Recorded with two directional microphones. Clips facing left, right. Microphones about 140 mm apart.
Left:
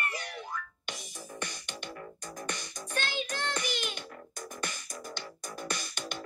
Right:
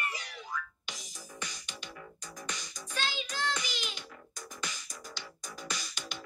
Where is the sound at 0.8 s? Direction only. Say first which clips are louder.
Left 5 dB; 55° left (ahead or behind).